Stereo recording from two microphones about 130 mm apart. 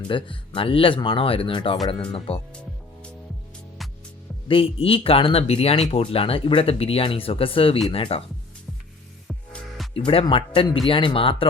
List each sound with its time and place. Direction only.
0.1 s speech: 40° left (ahead or behind)
4.4 s speech: 45° left (ahead or behind)
9.2 s music: centre (ahead or behind)
10.1 s speech: 45° left (ahead or behind)